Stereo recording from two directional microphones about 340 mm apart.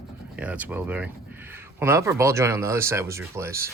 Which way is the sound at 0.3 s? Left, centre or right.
Centre.